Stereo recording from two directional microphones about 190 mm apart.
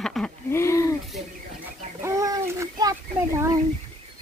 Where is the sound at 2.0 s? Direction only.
15° right (ahead or behind).